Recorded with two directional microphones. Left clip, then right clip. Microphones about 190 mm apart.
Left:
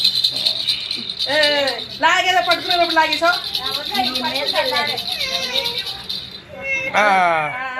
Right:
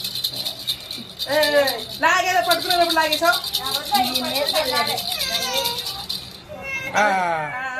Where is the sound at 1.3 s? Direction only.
20° left (ahead or behind).